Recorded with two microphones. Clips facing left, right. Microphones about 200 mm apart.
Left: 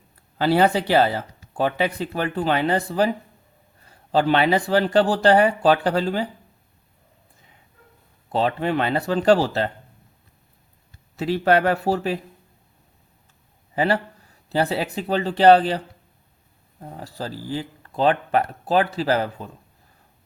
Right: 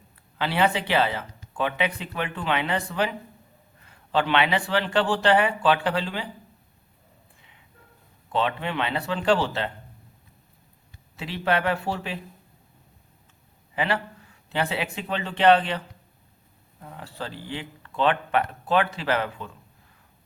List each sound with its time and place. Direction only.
0.3 s speech: 40° left (ahead or behind)
8.3 s speech: 40° left (ahead or behind)
11.2 s speech: 40° left (ahead or behind)
13.7 s speech: 40° left (ahead or behind)
16.8 s speech: 40° left (ahead or behind)